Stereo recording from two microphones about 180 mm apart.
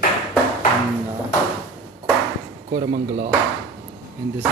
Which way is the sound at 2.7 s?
55° right (ahead or behind).